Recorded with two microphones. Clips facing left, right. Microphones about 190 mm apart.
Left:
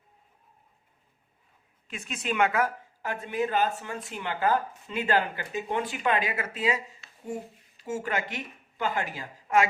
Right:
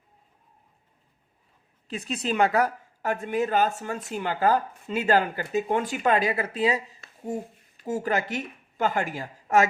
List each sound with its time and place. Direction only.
1.9 s a woman's voice: 35° right (ahead or behind)
7.9 s a woman's voice: 40° right (ahead or behind)